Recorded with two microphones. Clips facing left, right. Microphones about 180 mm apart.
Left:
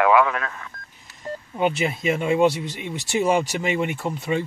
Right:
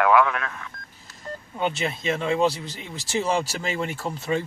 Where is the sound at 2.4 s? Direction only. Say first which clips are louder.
Left 4 dB; centre (ahead or behind).